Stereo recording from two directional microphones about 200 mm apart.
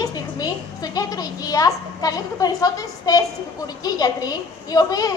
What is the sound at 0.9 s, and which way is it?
Speech, 20° left (ahead or behind).